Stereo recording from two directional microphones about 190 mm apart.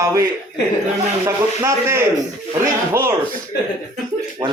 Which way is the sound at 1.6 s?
15° right (ahead or behind).